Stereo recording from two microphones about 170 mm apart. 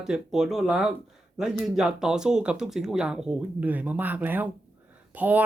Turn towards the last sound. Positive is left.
turn(degrees=-10)  # may be behind; listen again after turning